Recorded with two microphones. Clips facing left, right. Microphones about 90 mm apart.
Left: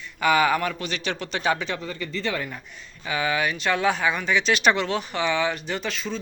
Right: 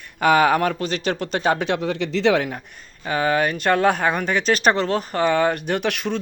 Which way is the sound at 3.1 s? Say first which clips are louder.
Right 5 dB; 45° right (ahead or behind).